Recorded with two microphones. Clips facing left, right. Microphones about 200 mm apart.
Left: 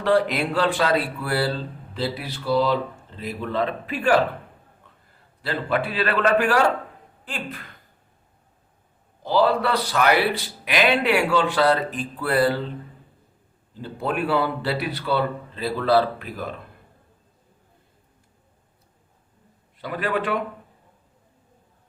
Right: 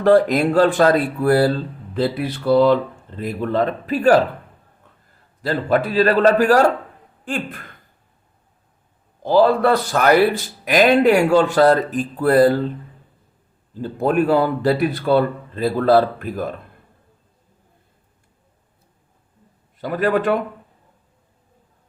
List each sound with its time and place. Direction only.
0.0 s a man's voice: 45° right (ahead or behind)
5.4 s a man's voice: 40° right (ahead or behind)
9.2 s a man's voice: 50° right (ahead or behind)
13.7 s a man's voice: 45° right (ahead or behind)
19.8 s a man's voice: 45° right (ahead or behind)